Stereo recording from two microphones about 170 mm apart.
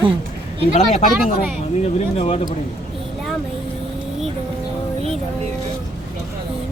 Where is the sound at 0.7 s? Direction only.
40° left (ahead or behind).